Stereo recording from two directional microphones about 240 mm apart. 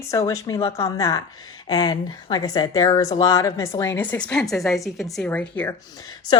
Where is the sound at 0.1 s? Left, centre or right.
Centre.